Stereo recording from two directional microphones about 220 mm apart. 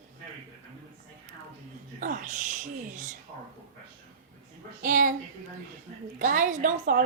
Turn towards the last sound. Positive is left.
turn(degrees=-35)  # may be behind; listen again after turning